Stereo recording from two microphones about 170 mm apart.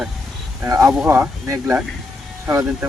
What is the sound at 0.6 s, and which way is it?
Speech, 20° right (ahead or behind).